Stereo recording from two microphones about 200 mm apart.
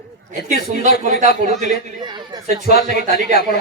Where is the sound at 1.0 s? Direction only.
35° right (ahead or behind).